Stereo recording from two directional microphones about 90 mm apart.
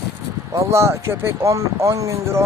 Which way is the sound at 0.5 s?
30° right (ahead or behind).